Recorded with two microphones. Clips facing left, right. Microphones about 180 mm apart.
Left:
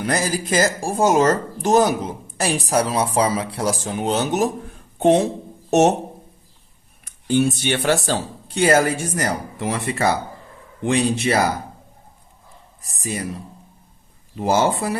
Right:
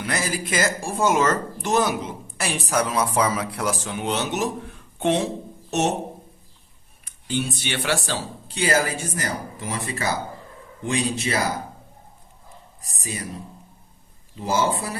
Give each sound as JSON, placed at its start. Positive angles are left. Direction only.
{"t": 0.0, "sound": "speech", "side_deg": 40}
{"t": 7.3, "sound": "speech", "side_deg": 50}
{"t": 14.3, "sound": "speech", "side_deg": 60}